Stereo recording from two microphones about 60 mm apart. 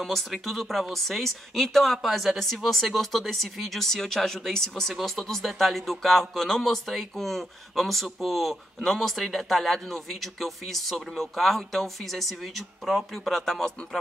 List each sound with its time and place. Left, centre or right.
0.0 s speech: centre